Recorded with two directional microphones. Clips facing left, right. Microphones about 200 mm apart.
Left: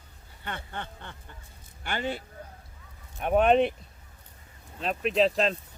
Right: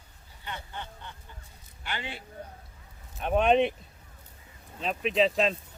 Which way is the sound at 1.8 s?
45° left (ahead or behind).